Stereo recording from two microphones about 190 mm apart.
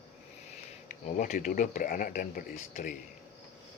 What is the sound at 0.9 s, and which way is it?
Speech, 40° left (ahead or behind).